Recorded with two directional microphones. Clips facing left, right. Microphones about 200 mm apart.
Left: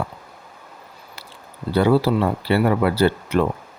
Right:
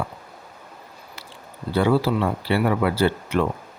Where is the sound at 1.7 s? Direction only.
40° left (ahead or behind).